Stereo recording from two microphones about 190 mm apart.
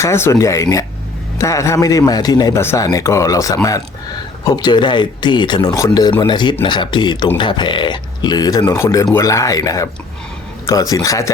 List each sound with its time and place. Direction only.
0.0 s a man's voice: 15° left (ahead or behind)